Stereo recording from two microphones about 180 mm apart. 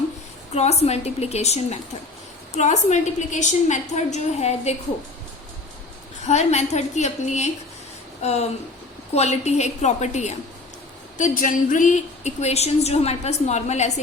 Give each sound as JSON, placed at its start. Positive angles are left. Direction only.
{"t": 0.5, "sound": "a woman's voice", "side_deg": 35}
{"t": 6.2, "sound": "a woman's voice", "side_deg": 40}